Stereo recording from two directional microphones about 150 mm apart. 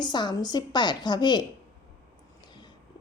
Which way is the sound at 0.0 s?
30° left (ahead or behind).